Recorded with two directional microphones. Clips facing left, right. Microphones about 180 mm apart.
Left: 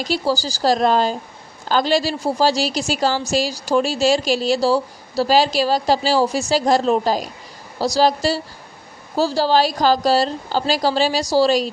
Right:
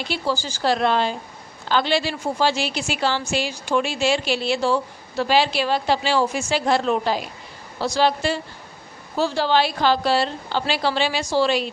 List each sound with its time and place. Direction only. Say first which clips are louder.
0.0 s a woman's voice: left 4 dB; 40° left (ahead or behind)